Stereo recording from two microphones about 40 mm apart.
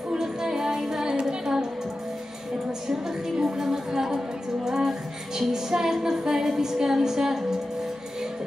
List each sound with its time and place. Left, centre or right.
0.1 s child singing: centre
3.3 s music: centre
5.5 s a sound: centre